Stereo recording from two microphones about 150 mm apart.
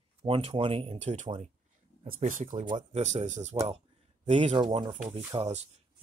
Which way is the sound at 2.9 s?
50° right (ahead or behind).